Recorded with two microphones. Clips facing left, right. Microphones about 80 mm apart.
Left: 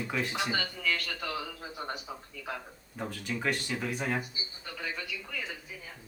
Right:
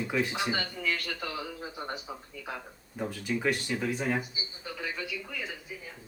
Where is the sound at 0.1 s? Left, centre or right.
Centre.